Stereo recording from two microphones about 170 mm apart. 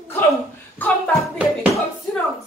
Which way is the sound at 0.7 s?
10° left (ahead or behind).